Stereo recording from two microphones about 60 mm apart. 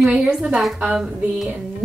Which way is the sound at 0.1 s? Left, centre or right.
Centre.